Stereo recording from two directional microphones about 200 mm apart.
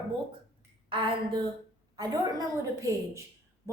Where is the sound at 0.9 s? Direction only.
25° right (ahead or behind).